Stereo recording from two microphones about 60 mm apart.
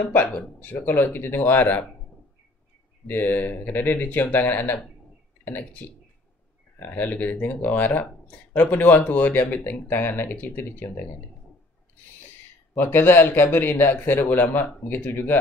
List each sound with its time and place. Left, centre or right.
0.1 s a man's voice: left
3.1 s a man's voice: left
6.8 s speech: left
12.7 s a man's voice: left